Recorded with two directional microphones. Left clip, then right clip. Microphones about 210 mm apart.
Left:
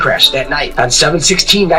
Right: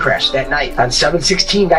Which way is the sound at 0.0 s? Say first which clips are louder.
Left 4 dB; 45° left (ahead or behind).